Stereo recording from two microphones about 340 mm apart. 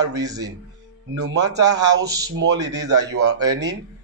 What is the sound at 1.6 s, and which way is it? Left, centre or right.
Speech, right.